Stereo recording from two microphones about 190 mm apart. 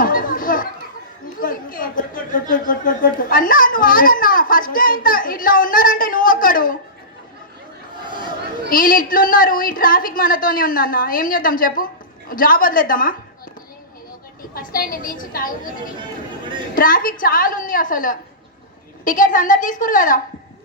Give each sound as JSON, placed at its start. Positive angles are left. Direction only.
{"t": 0.0, "sound": "children playing", "side_deg": 45}
{"t": 1.4, "sound": "chatter", "side_deg": 45}
{"t": 2.5, "sound": "a sound", "side_deg": 45}
{"t": 8.7, "sound": "a woman's voice", "side_deg": 50}
{"t": 14.5, "sound": "a woman's voice", "side_deg": 50}
{"t": 16.7, "sound": "a woman's voice", "side_deg": 45}